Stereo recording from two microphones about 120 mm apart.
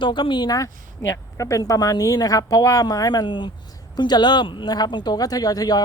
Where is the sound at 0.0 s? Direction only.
40° left (ahead or behind).